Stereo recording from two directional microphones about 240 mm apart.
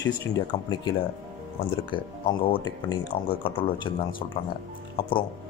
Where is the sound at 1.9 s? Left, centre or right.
Left.